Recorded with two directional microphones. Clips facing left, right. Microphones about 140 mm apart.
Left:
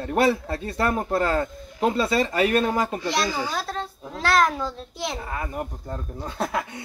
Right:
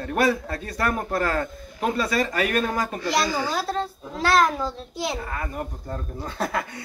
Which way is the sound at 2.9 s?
Centre (ahead or behind).